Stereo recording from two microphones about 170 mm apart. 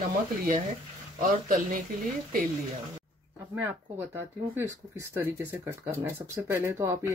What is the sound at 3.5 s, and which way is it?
Speech, 10° right (ahead or behind).